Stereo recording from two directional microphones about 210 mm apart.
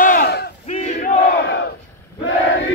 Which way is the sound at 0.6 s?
30° left (ahead or behind).